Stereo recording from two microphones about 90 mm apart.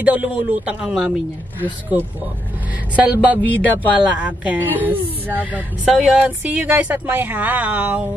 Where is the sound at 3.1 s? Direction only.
10° right (ahead or behind).